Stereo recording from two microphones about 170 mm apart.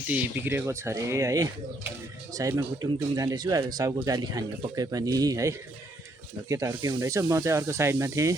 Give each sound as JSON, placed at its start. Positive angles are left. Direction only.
{"t": 0.1, "sound": "speech", "side_deg": -10}